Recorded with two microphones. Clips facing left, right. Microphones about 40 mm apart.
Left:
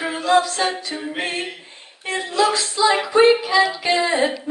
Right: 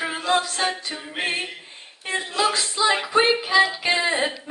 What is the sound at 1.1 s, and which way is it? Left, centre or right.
Female singing, centre.